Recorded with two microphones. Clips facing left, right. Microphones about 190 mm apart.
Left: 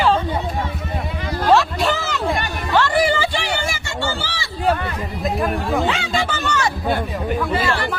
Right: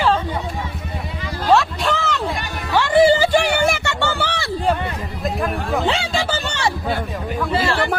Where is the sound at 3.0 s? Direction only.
35° right (ahead or behind); by 4.5 s 60° right (ahead or behind).